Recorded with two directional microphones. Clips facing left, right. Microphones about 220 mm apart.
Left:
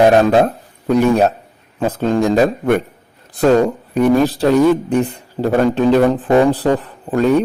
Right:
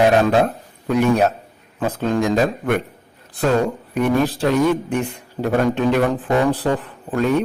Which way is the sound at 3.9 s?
35° left (ahead or behind).